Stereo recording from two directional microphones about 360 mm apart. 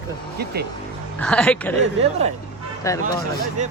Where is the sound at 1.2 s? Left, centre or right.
Centre.